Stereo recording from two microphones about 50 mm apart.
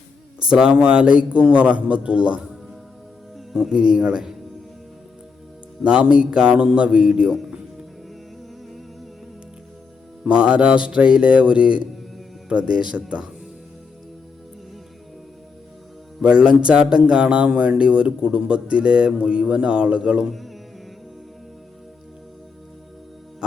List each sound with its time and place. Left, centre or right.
0.4 s a man's voice: centre
3.3 s speech: centre
5.8 s a man's voice: right
10.2 s a man's voice: right
16.2 s a man's voice: right
20.2 s mantra: centre
23.4 s music: centre